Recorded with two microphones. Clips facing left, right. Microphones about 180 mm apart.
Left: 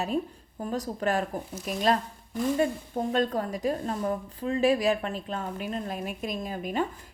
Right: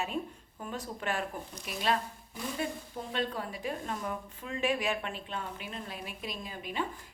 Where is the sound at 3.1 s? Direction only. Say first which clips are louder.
Left 7 dB; 45° left (ahead or behind).